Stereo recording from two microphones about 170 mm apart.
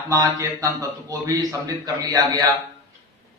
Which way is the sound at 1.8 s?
20° right (ahead or behind).